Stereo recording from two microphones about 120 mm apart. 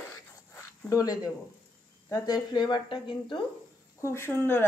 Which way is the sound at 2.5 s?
35° left (ahead or behind).